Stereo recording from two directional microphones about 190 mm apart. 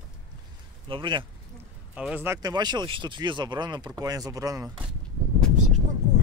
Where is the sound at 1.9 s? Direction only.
5° right (ahead or behind).